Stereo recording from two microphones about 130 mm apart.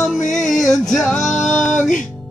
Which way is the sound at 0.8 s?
5° left (ahead or behind).